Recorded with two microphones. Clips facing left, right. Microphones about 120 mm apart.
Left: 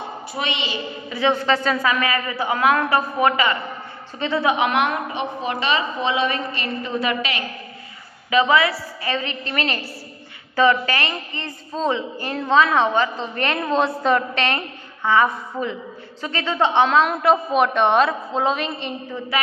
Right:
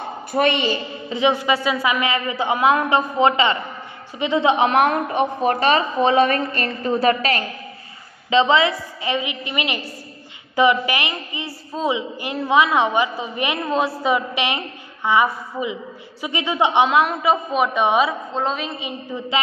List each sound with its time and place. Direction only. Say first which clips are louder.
0.3 s a woman's voice: right 9 dB; 50° right (ahead or behind)
1.1 s a man's voice: right 1 dB; 15° right (ahead or behind)
4.6 s a woman's voice: right 3 dB; 35° right (ahead or behind)
8.3 s a woman's voice: right 1 dB; 25° right (ahead or behind); by 18.9 s 5° right (ahead or behind)
19.3 s a man's voice: right 1 dB; 20° right (ahead or behind)